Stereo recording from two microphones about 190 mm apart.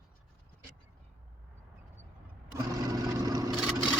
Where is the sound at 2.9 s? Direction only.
20° right (ahead or behind).